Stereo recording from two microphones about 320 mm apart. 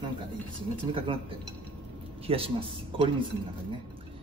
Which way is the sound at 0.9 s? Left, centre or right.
Centre.